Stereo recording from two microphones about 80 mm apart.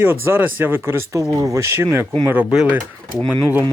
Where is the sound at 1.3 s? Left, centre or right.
Right.